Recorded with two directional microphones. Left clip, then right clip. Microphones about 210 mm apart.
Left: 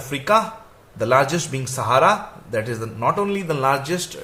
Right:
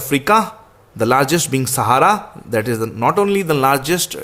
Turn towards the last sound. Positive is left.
turn(degrees=-45)  # may be behind; listen again after turning